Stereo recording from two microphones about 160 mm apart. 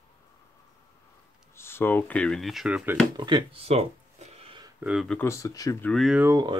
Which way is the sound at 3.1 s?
30° right (ahead or behind).